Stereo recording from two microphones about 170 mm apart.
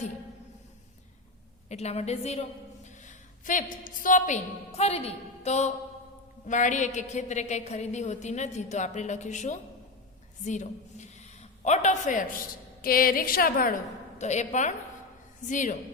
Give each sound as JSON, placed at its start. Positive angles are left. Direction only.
{"t": 1.7, "sound": "a woman's voice", "side_deg": 40}
{"t": 3.1, "sound": "a sound", "side_deg": 50}
{"t": 4.0, "sound": "a woman's voice", "side_deg": 45}
{"t": 12.8, "sound": "a woman's voice", "side_deg": 60}
{"t": 14.2, "sound": "a woman's voice", "side_deg": 45}